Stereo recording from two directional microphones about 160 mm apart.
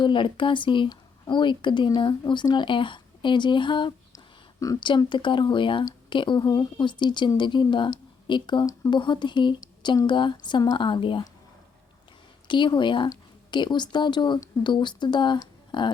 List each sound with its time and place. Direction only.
0.0 s a woman's voice: 30° left (ahead or behind)
12.5 s a woman's voice: 30° left (ahead or behind)